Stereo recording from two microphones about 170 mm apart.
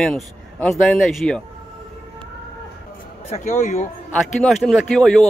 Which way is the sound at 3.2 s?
40° left (ahead or behind).